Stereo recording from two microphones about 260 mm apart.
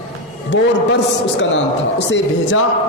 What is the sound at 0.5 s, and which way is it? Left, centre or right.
A man's voice, left.